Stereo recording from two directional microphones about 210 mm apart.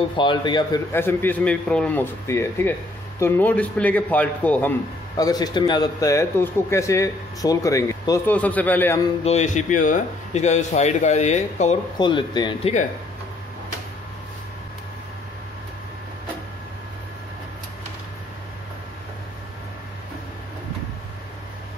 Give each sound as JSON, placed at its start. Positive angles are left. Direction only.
{"t": 0.2, "sound": "speech", "side_deg": 20}
{"t": 0.9, "sound": "a man's voice", "side_deg": 10}
{"t": 5.1, "sound": "a man's voice", "side_deg": 20}
{"t": 9.2, "sound": "speech", "side_deg": 35}
{"t": 12.0, "sound": "speech", "side_deg": 20}